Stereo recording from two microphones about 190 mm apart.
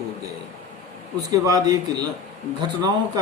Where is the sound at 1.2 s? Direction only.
20° right (ahead or behind).